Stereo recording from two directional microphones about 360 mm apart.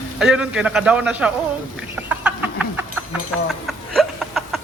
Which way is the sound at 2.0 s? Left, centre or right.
Centre.